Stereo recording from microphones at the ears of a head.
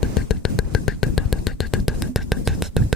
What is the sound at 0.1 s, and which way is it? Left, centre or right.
Music, left.